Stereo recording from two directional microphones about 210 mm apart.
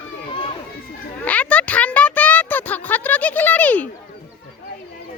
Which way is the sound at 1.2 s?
5° left (ahead or behind).